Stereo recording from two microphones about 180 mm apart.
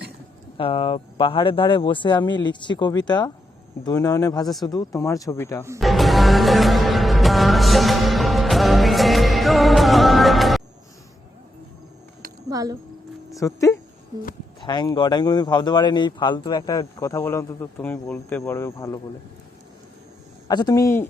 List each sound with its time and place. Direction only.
0.5 s speech: 30° left (ahead or behind); by 5.6 s 15° left (ahead or behind)
5.8 s music: centre (ahead or behind)
12.5 s a sound: 20° right (ahead or behind)
13.3 s speech: 15° left (ahead or behind)
20.5 s speech: 20° left (ahead or behind)